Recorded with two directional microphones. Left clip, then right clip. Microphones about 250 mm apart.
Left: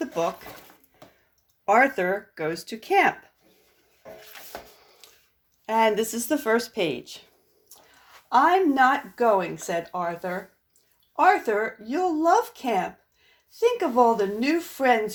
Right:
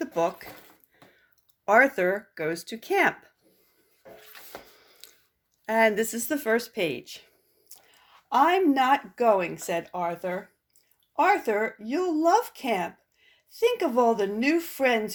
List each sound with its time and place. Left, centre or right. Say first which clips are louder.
0.0 s speech: even; right
1.6 s speech: even; right
5.0 s a sound: right 1 dB; right
5.6 s speech: left 1 dB; right
8.3 s speech: left 2 dB; right
11.1 s speech: left 3 dB; right